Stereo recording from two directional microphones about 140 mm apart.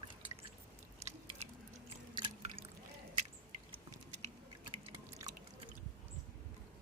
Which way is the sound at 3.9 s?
55° right (ahead or behind).